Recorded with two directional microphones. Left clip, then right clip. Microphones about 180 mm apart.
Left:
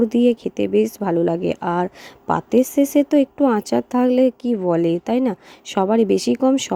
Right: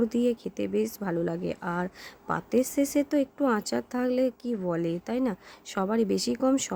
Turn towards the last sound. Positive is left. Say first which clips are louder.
# left 8 dB
turn(degrees=25)  # may be behind; listen again after turning